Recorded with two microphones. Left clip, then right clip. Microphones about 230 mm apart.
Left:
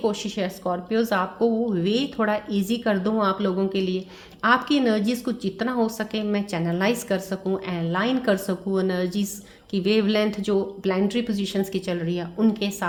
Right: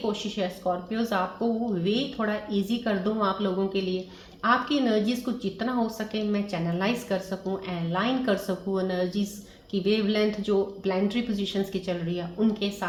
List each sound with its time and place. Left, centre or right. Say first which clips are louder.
0.1 s a woman's voice: left 2 dB; left